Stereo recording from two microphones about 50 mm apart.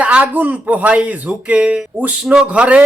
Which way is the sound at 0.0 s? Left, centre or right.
Right.